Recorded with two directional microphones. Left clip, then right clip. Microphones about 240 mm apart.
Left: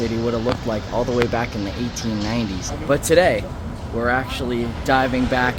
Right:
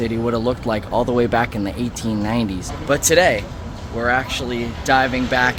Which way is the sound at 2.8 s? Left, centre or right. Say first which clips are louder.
Right 1 dB; centre.